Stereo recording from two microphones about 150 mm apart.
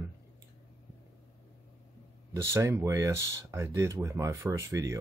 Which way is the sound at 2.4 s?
15° right (ahead or behind).